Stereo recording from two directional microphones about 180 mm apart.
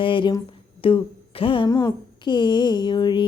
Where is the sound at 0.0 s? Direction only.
25° left (ahead or behind).